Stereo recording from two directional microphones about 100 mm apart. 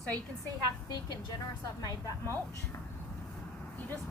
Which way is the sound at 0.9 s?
45° left (ahead or behind).